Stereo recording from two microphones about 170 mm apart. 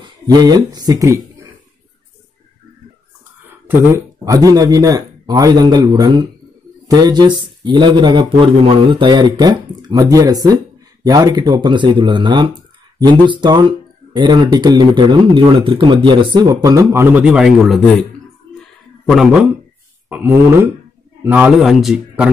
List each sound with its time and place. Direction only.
0.0 s speech: 25° right (ahead or behind)
3.6 s speech: 15° right (ahead or behind); by 17.8 s centre (ahead or behind)
19.0 s speech: centre (ahead or behind)
20.1 s a man's voice: 10° right (ahead or behind)